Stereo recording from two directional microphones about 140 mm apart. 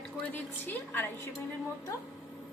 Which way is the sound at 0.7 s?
15° left (ahead or behind).